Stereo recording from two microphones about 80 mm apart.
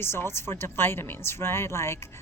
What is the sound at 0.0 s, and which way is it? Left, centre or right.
Speech, left.